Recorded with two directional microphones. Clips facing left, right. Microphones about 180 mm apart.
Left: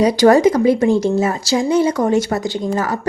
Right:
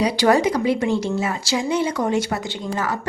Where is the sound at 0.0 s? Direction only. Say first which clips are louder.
Left 6 dB; 45° left (ahead or behind).